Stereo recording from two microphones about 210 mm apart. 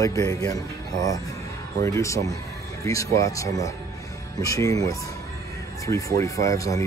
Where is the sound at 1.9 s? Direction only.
15° left (ahead or behind).